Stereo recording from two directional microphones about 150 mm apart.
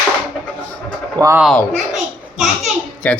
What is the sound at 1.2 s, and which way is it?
Speech, 20° right (ahead or behind).